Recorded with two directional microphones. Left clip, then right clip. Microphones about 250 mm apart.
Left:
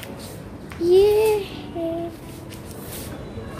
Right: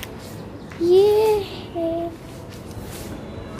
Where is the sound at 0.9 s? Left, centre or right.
Centre.